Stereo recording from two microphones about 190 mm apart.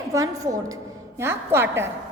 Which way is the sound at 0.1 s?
20° right (ahead or behind).